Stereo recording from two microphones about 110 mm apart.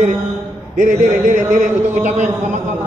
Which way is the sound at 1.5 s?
90° right.